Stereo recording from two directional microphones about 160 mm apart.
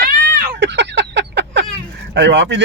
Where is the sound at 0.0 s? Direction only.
65° right (ahead or behind); by 1.6 s 90° right.